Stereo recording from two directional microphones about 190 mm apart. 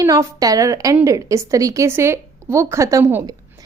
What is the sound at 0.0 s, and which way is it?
A woman's voice, 15° right (ahead or behind).